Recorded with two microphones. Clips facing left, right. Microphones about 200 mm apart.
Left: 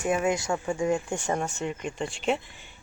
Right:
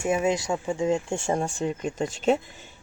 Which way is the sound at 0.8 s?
25° right (ahead or behind).